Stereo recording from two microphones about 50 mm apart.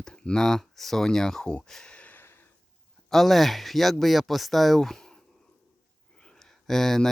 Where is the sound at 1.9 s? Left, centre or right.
Left.